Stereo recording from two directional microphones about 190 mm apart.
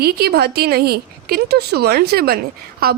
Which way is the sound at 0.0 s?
55° right (ahead or behind).